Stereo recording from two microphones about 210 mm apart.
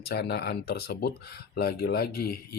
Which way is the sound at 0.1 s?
50° left (ahead or behind).